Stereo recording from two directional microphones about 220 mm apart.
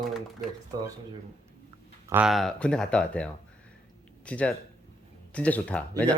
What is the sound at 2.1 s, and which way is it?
Speech, 5° right (ahead or behind).